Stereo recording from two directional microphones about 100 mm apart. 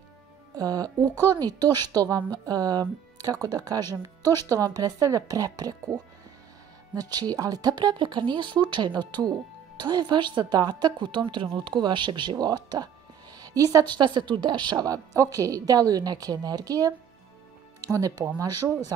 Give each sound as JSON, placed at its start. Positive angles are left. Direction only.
{"t": 0.6, "sound": "speech", "side_deg": -40}
{"t": 7.0, "sound": "a woman's voice", "side_deg": -40}